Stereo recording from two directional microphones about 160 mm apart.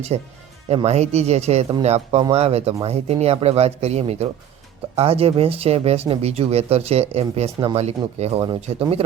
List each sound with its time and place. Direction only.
0.1 s speech: 45° right (ahead or behind)